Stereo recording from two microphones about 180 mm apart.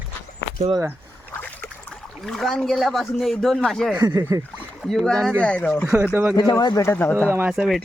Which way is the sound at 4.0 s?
20° right (ahead or behind).